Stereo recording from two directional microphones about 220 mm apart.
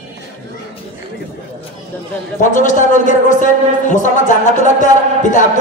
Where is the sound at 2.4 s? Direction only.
35° left (ahead or behind).